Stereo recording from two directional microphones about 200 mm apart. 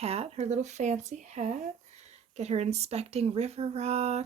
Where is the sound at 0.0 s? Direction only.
30° right (ahead or behind).